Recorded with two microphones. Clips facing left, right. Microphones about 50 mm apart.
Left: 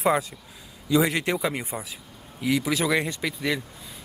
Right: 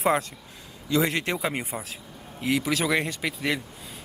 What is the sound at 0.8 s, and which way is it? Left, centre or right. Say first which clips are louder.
Speech: left 2 dB; centre.